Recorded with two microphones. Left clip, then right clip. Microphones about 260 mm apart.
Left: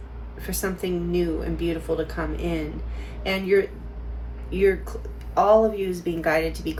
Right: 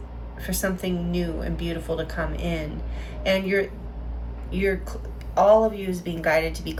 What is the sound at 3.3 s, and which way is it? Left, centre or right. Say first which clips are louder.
A woman's voice: left 1 dB; centre.